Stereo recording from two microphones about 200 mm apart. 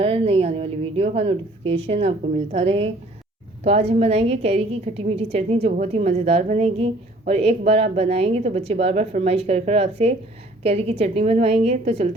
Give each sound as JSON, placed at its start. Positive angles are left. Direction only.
{"t": 0.0, "sound": "a woman's voice", "side_deg": -30}